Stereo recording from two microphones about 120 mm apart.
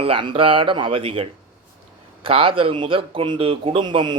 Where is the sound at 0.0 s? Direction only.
45° right (ahead or behind).